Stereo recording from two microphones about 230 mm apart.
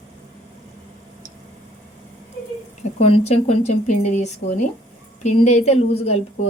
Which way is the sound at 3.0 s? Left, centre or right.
Left.